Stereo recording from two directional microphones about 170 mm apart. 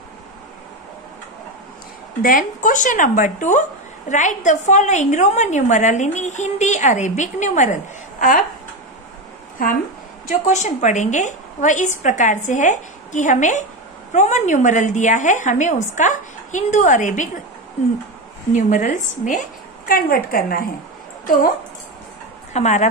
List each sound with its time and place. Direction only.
2.2 s a woman's voice: 50° left (ahead or behind)
10.4 s a woman's voice: 45° left (ahead or behind)
18.5 s a woman's voice: 45° left (ahead or behind)
19.9 s a woman's voice: 60° left (ahead or behind)
22.5 s speech: 40° left (ahead or behind)